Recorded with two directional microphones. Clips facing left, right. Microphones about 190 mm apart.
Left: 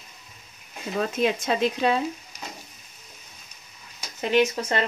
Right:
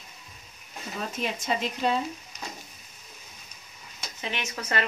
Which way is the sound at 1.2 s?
90° left.